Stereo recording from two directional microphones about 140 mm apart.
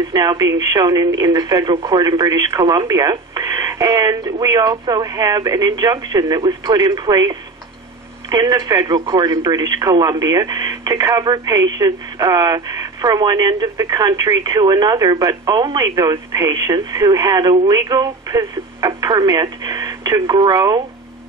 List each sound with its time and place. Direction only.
0.1 s speech: 30° right (ahead or behind)